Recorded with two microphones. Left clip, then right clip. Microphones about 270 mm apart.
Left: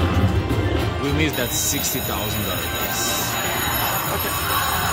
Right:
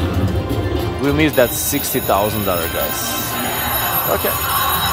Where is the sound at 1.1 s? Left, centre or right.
Centre.